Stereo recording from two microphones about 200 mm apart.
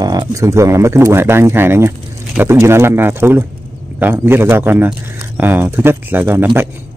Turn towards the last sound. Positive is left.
turn(degrees=-10)  # may be behind; listen again after turning